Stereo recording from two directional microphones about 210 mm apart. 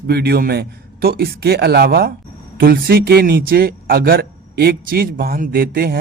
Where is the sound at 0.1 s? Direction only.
50° right (ahead or behind).